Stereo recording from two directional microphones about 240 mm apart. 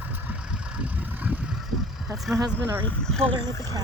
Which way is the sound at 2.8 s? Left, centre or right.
Centre.